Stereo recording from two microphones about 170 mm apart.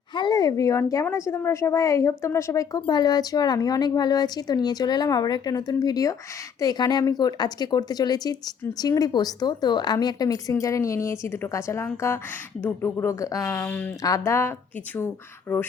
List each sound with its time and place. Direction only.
0.1 s a woman's voice: 25° left (ahead or behind); by 15.6 s 5° left (ahead or behind)